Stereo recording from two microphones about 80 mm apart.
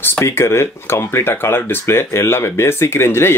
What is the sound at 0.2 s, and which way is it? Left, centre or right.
Speech, left.